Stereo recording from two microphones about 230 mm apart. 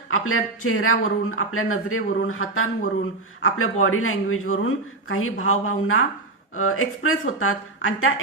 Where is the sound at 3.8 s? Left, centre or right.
Left.